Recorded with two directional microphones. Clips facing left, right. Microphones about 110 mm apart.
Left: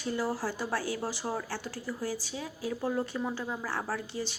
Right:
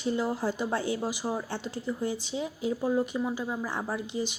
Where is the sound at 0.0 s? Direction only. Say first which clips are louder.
Right 3 dB; 20° right (ahead or behind).